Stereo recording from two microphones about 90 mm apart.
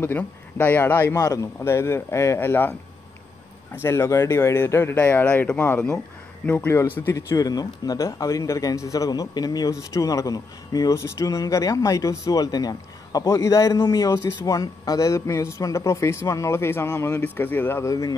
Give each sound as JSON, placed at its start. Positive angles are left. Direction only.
{"t": 0.0, "sound": "speech", "side_deg": 20}
{"t": 1.1, "sound": "speech", "side_deg": 40}
{"t": 3.7, "sound": "speech", "side_deg": 30}
{"t": 7.2, "sound": "speech", "side_deg": 40}
{"t": 13.2, "sound": "speech", "side_deg": 35}
{"t": 17.8, "sound": "speech", "side_deg": 35}